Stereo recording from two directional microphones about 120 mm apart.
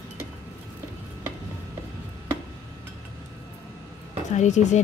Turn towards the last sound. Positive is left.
turn(degrees=80)